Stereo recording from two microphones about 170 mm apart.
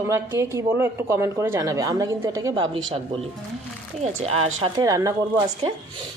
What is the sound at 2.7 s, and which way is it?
Speech, 30° right (ahead or behind).